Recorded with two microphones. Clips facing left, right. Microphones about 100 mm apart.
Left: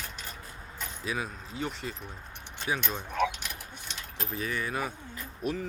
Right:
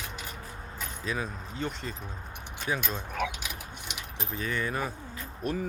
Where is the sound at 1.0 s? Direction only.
10° left (ahead or behind).